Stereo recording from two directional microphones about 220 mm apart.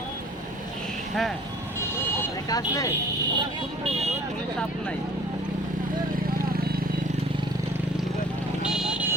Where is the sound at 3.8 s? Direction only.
30° right (ahead or behind).